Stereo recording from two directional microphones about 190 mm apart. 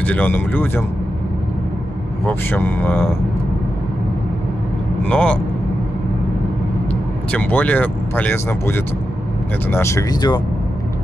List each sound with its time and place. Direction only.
0.0 s speech: 10° left (ahead or behind)
2.2 s speech: 10° left (ahead or behind)
5.0 s speech: 5° left (ahead or behind)
7.2 s speech: 10° left (ahead or behind)